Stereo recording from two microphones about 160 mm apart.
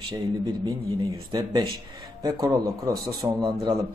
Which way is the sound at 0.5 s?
30° right (ahead or behind).